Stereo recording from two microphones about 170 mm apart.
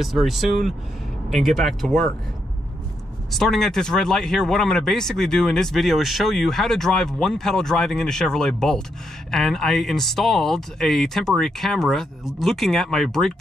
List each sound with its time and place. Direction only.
0.0 s speech: centre (ahead or behind)
3.3 s speech: centre (ahead or behind)